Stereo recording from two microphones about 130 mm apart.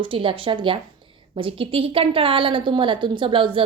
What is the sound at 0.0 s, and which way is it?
A woman's voice, 40° right (ahead or behind).